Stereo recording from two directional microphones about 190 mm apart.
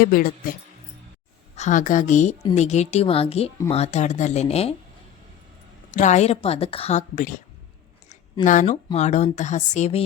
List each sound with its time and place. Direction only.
0.0 s speech: 50° left (ahead or behind)
1.5 s a woman's voice: 40° left (ahead or behind)
5.9 s a woman's voice: 40° left (ahead or behind)
8.4 s a woman's voice: 40° left (ahead or behind)